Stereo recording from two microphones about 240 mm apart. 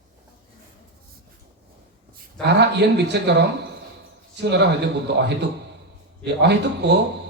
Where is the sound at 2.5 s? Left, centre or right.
Right.